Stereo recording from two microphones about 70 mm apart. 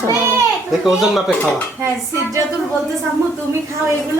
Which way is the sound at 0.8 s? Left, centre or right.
Centre.